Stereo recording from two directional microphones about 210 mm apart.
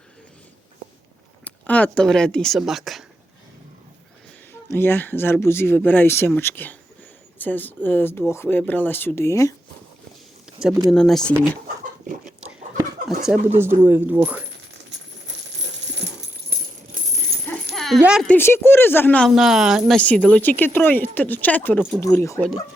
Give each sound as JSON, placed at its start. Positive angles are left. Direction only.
{"t": 1.5, "sound": "speech", "side_deg": 5}
{"t": 4.7, "sound": "speech", "side_deg": 10}
{"t": 10.9, "sound": "speech", "side_deg": 5}
{"t": 13.2, "sound": "speech", "side_deg": -5}
{"t": 16.5, "sound": "music", "side_deg": -50}
{"t": 17.0, "sound": "rattle", "side_deg": -40}
{"t": 17.7, "sound": "speech", "side_deg": 0}